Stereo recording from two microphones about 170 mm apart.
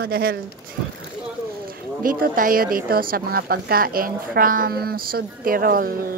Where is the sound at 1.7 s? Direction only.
55° right (ahead or behind).